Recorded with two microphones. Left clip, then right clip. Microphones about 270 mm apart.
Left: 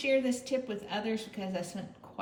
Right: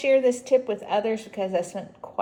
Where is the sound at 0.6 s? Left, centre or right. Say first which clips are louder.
Right 11 dB; right.